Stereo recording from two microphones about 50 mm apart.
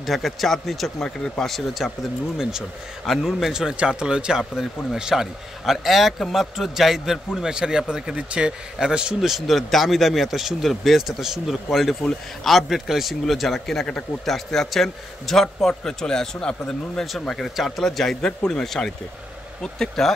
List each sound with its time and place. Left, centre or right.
0.0 s speech: centre
1.0 s a man's voice: centre
1.5 s speech: centre
3.1 s speech: centre
3.7 s a man's voice: centre
9.3 s a man's voice: centre